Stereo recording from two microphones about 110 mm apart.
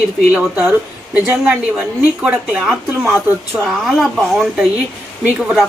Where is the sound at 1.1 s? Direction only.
15° right (ahead or behind).